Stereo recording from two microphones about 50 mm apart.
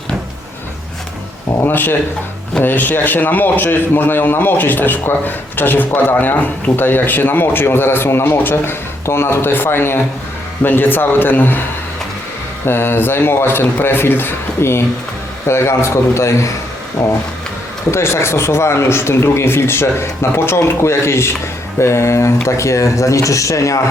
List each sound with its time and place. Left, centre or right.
1.6 s a man's voice: left
12.6 s a man's voice: left
17.0 s speech: left
22.4 s speech: left